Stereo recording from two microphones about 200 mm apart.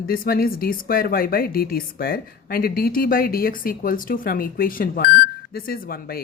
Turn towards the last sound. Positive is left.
turn(degrees=50)  # may be behind; listen again after turning